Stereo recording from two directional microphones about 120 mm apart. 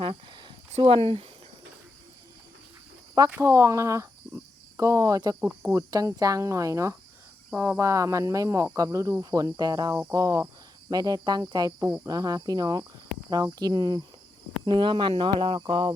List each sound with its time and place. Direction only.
0.0 s a sound: 45° right (ahead or behind)
0.7 s speech: 45° right (ahead or behind)
3.2 s speech: 20° right (ahead or behind)
5.4 s speech: 15° right (ahead or behind)
5.9 s speech: 30° right (ahead or behind)
11.8 s speech: 10° right (ahead or behind)
12.0 s speech: 30° right (ahead or behind)